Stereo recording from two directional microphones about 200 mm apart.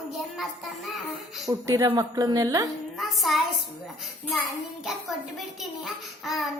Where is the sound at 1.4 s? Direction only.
15° right (ahead or behind).